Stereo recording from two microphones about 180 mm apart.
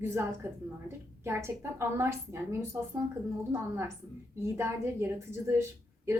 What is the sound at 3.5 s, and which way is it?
A woman's voice, 15° right (ahead or behind).